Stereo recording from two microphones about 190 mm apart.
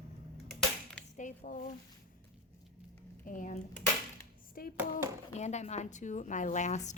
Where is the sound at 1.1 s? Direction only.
45° left (ahead or behind).